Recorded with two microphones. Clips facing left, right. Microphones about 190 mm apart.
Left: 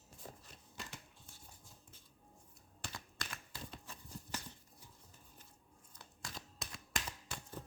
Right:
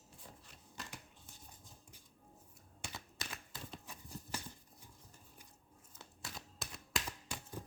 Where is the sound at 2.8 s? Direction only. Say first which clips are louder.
Even; 5° right (ahead or behind).